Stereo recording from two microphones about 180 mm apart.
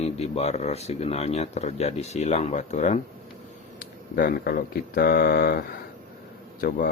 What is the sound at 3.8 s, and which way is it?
Speech, 55° left (ahead or behind).